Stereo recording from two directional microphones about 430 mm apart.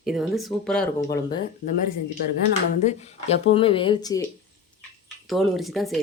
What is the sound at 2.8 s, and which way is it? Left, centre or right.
Speech, centre.